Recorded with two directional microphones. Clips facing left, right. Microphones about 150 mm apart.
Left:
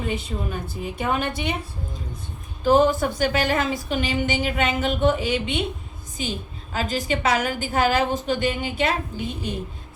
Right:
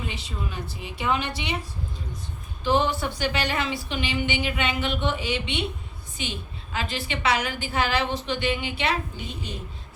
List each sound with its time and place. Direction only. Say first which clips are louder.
0.0 s a woman's voice: left 6 dB; 50° left (ahead or behind)
2.6 s a woman's voice: left 6 dB; 45° left (ahead or behind)